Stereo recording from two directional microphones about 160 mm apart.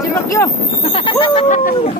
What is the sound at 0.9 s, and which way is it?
Speech, 30° left (ahead or behind).